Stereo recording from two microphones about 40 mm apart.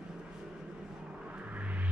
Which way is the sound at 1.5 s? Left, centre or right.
Right.